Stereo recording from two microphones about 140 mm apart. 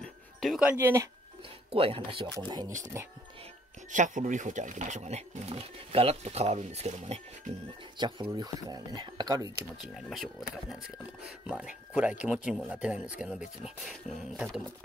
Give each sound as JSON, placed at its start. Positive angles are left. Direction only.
{"t": 0.0, "sound": "dog", "side_deg": 0}
{"t": 1.7, "sound": "speech", "side_deg": -40}
{"t": 2.3, "sound": "speech", "side_deg": -30}
{"t": 3.9, "sound": "speech", "side_deg": -65}
{"t": 8.3, "sound": "speech", "side_deg": -25}
{"t": 9.9, "sound": "speech", "side_deg": 0}